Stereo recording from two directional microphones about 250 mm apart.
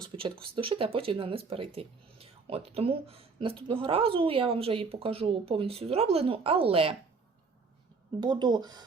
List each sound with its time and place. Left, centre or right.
0.0 s speech: centre
8.2 s speech: centre